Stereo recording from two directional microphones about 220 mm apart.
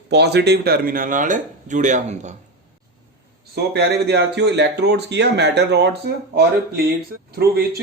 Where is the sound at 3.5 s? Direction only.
50° right (ahead or behind).